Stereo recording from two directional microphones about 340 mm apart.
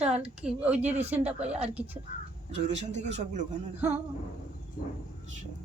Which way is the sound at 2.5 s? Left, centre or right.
Centre.